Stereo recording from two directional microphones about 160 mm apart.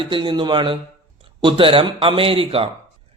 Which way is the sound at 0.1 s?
30° right (ahead or behind).